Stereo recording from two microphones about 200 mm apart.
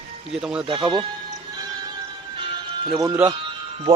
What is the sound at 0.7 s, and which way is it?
Speech, 25° right (ahead or behind).